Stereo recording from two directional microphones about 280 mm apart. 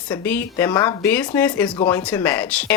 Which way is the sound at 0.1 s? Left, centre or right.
Centre.